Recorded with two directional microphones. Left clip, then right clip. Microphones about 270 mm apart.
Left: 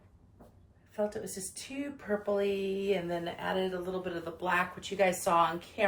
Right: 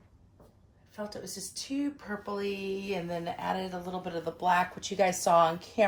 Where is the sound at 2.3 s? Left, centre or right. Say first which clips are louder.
Left 2 dB; right.